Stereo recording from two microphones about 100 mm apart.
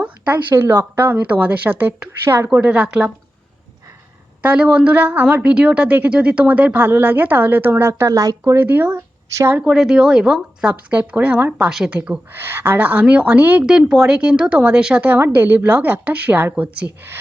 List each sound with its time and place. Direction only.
0.5 s speech: 25° right (ahead or behind)
2.3 s speech: 25° right (ahead or behind)
2.6 s a woman's voice: 15° right (ahead or behind)
4.4 s a woman's voice: 10° right (ahead or behind); by 8.5 s 35° right (ahead or behind)
8.5 s speech: 20° right (ahead or behind)
9.7 s a woman's voice: 5° right (ahead or behind)
11.7 s speech: 5° right (ahead or behind)
11.9 s a woman's voice: 15° right (ahead or behind)